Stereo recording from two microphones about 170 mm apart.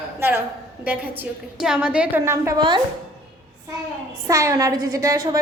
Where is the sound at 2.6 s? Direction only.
25° right (ahead or behind).